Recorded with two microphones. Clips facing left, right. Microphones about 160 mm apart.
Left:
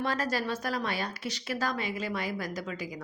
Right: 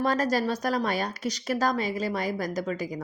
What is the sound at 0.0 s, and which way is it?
A woman's voice, 40° right (ahead or behind).